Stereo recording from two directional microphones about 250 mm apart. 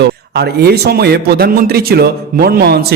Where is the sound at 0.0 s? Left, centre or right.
Right.